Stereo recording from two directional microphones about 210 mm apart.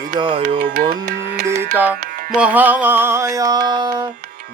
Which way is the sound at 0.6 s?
40° right (ahead or behind).